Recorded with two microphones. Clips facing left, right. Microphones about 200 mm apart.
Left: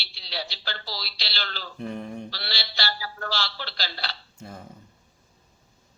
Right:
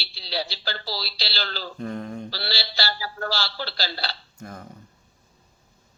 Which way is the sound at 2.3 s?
35° right (ahead or behind).